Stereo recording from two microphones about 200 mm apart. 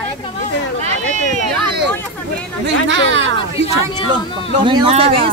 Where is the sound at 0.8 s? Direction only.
35° right (ahead or behind).